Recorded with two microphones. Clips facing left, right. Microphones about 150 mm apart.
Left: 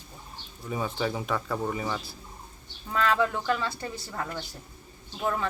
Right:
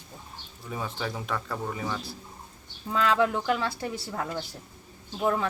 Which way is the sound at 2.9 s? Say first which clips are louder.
Right 1 dB; 15° right (ahead or behind).